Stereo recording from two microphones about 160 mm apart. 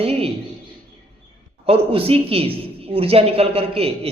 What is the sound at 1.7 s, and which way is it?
Speech, 35° right (ahead or behind).